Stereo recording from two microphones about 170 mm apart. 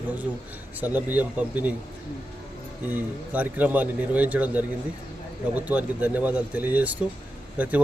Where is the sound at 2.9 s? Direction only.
10° right (ahead or behind).